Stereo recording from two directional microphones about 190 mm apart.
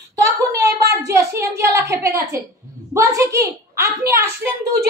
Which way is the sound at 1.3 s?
15° right (ahead or behind).